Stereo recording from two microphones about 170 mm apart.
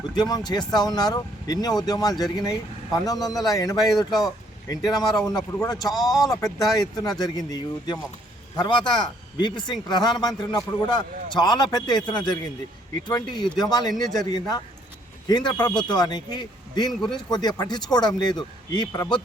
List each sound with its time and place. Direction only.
0.1 s speech: 25° left (ahead or behind)
5.9 s speech: centre (ahead or behind)
6.3 s speech: 20° left (ahead or behind)